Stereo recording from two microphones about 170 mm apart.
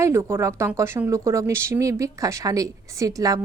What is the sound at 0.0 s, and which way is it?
A woman's voice, 15° right (ahead or behind).